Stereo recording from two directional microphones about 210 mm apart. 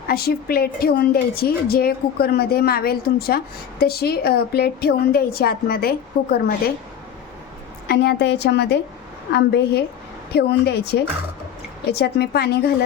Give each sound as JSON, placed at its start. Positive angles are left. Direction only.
{"t": 0.1, "sound": "a woman's voice", "side_deg": 45}
{"t": 7.9, "sound": "a woman's voice", "side_deg": 50}